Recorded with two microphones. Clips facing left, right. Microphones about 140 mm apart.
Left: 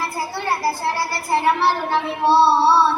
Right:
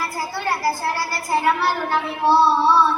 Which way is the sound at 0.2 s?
25° left (ahead or behind).